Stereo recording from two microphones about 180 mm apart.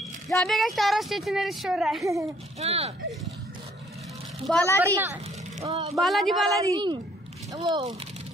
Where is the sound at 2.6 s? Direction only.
35° right (ahead or behind).